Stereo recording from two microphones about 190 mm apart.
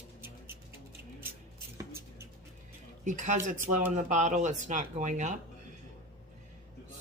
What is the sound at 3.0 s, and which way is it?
Speech, 40° right (ahead or behind).